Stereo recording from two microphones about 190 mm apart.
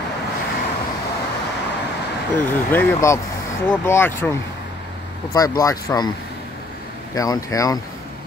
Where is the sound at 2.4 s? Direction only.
10° left (ahead or behind).